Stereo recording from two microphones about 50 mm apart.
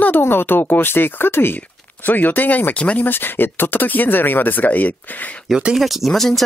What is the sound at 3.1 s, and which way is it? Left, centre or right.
Speech, left.